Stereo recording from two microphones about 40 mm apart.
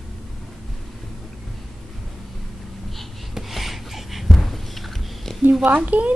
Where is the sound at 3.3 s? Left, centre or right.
Centre.